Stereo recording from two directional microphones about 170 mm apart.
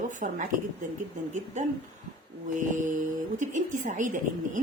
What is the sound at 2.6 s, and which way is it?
A woman's voice, 50° right (ahead or behind).